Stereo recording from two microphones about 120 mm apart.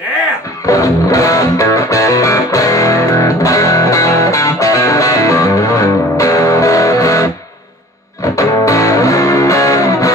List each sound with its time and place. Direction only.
0.7 s music: 30° left (ahead or behind)